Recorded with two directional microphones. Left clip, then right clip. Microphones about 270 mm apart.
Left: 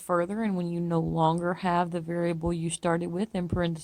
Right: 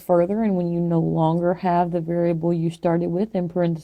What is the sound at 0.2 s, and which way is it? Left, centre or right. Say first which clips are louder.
A woman's voice: right 9 dB; left.